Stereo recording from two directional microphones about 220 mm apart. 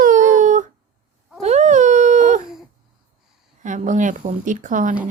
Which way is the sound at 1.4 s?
30° right (ahead or behind).